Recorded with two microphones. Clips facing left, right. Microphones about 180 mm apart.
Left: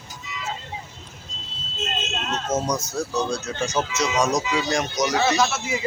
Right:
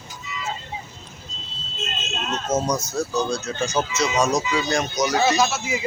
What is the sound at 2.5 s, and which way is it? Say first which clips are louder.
Speech: right 2 dB; 10° right (ahead or behind).